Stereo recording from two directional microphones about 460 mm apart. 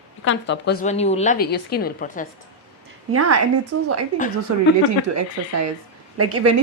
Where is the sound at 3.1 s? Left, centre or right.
Right.